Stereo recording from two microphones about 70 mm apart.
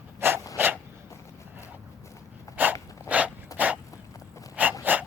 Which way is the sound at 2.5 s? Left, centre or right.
Left.